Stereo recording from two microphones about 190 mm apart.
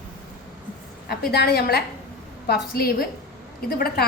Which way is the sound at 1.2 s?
60° left (ahead or behind).